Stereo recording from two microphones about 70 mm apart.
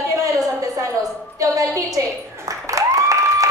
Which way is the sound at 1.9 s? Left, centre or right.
Right.